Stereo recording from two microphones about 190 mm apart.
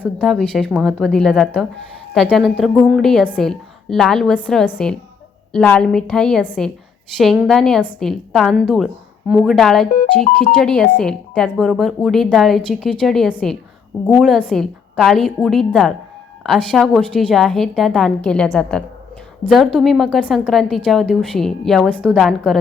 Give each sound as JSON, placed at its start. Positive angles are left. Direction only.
{"t": 0.2, "sound": "a woman's voice", "side_deg": 5}